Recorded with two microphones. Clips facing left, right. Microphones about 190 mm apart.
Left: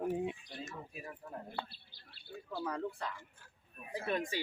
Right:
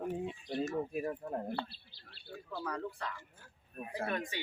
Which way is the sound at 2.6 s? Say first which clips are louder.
Left 1 dB; 25° left (ahead or behind).